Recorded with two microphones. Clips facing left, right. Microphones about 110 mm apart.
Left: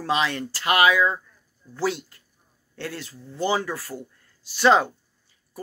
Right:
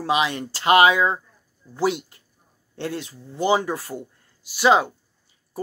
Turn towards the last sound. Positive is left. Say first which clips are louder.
# right 7 dB
turn(degrees=-30)  # may be behind; listen again after turning